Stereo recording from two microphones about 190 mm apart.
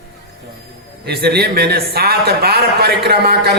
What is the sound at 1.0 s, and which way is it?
Speech, 55° right (ahead or behind).